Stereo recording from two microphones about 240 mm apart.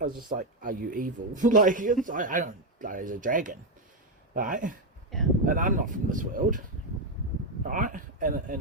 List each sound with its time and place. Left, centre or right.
0.0 s a man's voice: right
7.7 s speech: right